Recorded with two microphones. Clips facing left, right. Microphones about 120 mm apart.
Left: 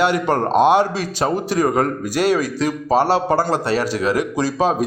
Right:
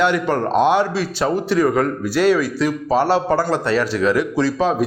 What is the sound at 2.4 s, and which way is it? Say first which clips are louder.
Speech: right 1 dB; 20° left (ahead or behind).